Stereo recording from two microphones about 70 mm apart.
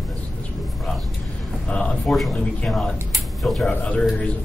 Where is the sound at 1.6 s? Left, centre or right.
Centre.